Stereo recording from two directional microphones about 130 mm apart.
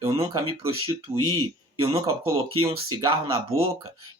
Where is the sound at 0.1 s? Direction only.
45° right (ahead or behind).